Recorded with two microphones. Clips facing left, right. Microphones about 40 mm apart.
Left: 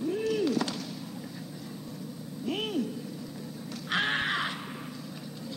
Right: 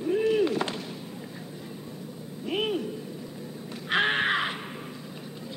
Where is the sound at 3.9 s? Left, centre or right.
Right.